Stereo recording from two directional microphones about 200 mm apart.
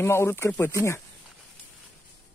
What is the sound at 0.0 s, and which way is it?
Speech, 10° left (ahead or behind).